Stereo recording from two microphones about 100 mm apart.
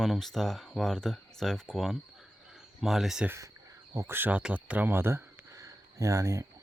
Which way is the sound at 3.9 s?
30° right (ahead or behind).